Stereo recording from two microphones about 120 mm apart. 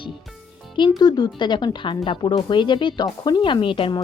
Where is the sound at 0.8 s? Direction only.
35° left (ahead or behind).